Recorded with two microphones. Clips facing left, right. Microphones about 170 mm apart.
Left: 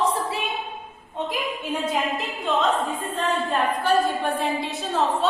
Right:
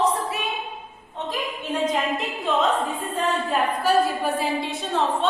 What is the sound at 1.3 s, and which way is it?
A woman's voice, 10° left (ahead or behind).